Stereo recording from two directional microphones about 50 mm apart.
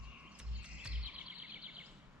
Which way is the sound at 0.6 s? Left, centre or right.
Right.